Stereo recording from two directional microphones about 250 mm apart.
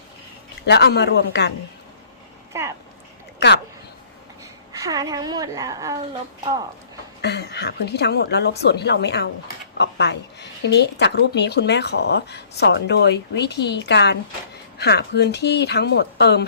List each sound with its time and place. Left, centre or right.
0.6 s speech: left
2.5 s speech: centre
3.4 s speech: left
4.7 s a woman's voice: centre
7.2 s speech: left